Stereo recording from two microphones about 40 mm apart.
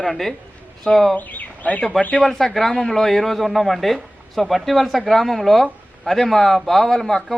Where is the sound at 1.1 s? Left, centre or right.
Left.